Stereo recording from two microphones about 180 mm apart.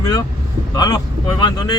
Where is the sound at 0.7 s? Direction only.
25° left (ahead or behind).